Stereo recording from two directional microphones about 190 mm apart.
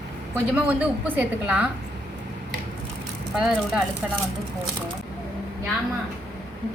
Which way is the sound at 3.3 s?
Centre (ahead or behind).